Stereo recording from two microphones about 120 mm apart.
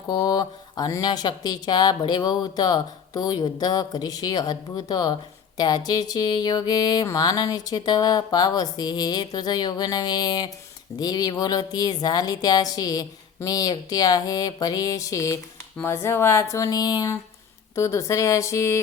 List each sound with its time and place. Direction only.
0.1 s speech: 35° left (ahead or behind)